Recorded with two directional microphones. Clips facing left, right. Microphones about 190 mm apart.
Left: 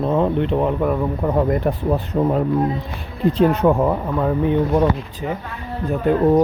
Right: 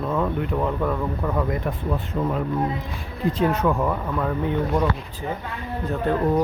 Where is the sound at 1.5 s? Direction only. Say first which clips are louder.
Left 7 dB; 40° left (ahead or behind); by 6.2 s 15° left (ahead or behind).